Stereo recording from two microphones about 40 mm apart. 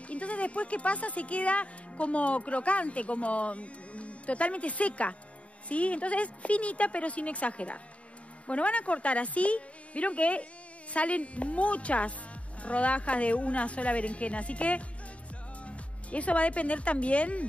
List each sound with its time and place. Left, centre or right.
0.1 s a woman's voice: left